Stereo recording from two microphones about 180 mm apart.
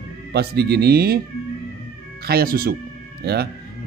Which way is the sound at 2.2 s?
60° right (ahead or behind).